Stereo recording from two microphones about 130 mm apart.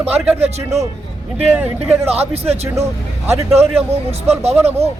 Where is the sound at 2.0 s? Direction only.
50° right (ahead or behind).